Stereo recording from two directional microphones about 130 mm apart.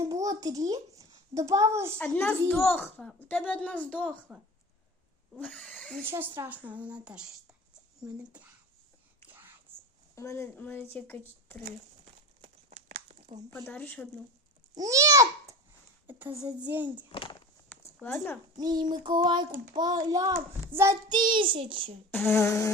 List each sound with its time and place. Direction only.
0.0 s a child's voice: 25° right (ahead or behind)
2.0 s speech: 10° left (ahead or behind)
6.1 s a woman's voice: 15° right (ahead or behind)
9.7 s whispering: 15° right (ahead or behind)
10.2 s speech: 20° left (ahead or behind)
12.7 s crumpling: 55° right (ahead or behind)
13.5 s speech: 15° left (ahead or behind)
14.8 s a child's voice: 25° right (ahead or behind)
17.1 s speech: 40° left (ahead or behind)
18.0 s speech: 15° left (ahead or behind)
18.6 s a child's voice: 30° right (ahead or behind)
21.1 s a child's voice: 35° right (ahead or behind)
22.1 s speech: 15° left (ahead or behind)